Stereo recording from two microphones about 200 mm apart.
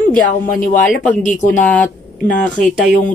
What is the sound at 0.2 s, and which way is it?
Speech, 40° left (ahead or behind).